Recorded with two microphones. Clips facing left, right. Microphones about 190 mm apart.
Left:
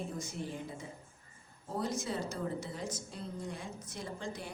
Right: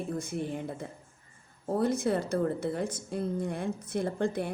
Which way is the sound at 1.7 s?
60° right (ahead or behind).